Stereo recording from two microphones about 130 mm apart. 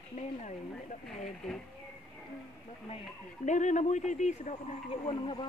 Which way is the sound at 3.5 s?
70° left (ahead or behind).